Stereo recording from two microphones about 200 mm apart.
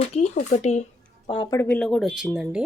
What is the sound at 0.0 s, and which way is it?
Speech, 30° left (ahead or behind).